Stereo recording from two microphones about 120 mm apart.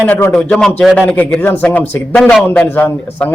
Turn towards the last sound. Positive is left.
turn(degrees=15)  # may be behind; listen again after turning